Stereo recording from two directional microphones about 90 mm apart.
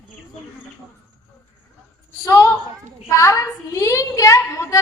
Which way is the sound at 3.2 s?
35° left (ahead or behind).